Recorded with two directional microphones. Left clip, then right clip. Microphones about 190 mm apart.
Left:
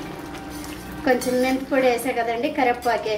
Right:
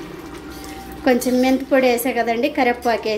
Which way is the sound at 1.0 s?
45° right (ahead or behind).